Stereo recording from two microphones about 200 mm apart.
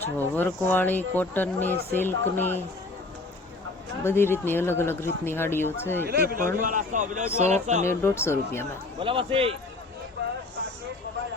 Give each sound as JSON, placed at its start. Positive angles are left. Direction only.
{"t": 0.2, "sound": "speech", "side_deg": 10}
{"t": 4.0, "sound": "speech", "side_deg": 10}
{"t": 6.1, "sound": "a man's voice", "side_deg": -50}
{"t": 7.9, "sound": "speech", "side_deg": 10}
{"t": 9.0, "sound": "a man's voice", "side_deg": -25}